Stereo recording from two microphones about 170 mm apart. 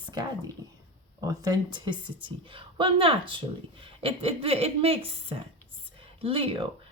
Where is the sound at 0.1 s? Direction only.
25° right (ahead or behind).